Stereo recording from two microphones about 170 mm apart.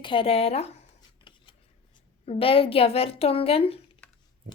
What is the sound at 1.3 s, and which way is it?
Scissors, 30° left (ahead or behind).